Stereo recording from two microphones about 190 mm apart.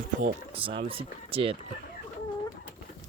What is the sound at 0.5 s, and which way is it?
Speech, 30° right (ahead or behind).